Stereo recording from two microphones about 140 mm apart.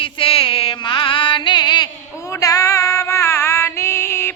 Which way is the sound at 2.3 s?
25° left (ahead or behind).